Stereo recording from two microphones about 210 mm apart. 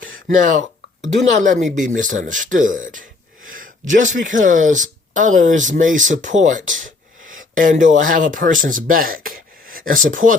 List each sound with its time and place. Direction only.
0.3 s speech: 40° right (ahead or behind)
7.3 s a sound: 40° right (ahead or behind)
8.0 s speech: 40° right (ahead or behind)